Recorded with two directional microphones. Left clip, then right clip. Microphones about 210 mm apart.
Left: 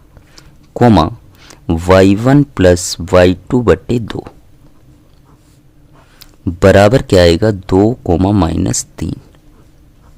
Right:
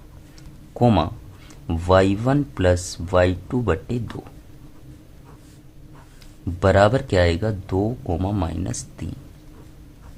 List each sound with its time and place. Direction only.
0.3 s speech: 45° left (ahead or behind)
6.1 s speech: 50° left (ahead or behind)